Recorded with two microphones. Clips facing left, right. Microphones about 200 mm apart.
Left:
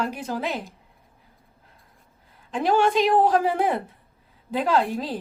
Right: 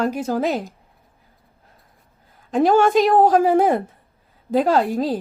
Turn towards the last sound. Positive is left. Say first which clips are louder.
# right 5 dB
turn(degrees=-40)  # may be behind; listen again after turning